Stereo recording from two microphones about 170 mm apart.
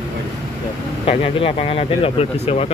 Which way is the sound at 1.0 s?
35° left (ahead or behind).